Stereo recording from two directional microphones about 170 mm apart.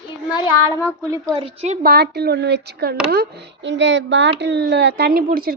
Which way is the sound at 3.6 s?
90° right.